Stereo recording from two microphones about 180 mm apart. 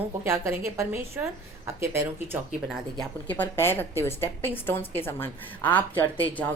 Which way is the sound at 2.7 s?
5° left (ahead or behind).